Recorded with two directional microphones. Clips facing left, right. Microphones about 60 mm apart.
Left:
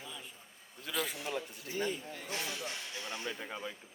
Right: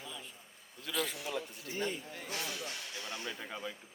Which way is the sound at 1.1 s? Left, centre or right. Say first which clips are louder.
Left 1 dB; left.